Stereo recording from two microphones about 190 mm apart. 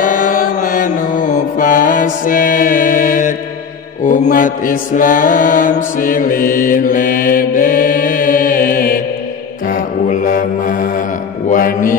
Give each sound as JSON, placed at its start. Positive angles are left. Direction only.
{"t": 0.0, "sound": "mantra", "side_deg": 45}